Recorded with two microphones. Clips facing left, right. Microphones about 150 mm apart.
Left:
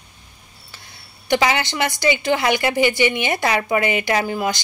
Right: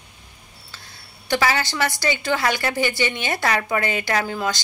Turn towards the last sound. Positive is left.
turn(degrees=10)  # may be behind; listen again after turning